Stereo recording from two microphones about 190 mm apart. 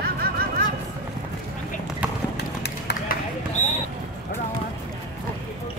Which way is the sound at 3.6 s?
40° left (ahead or behind).